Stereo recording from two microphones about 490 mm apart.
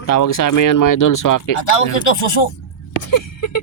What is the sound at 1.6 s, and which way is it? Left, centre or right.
Speech, left.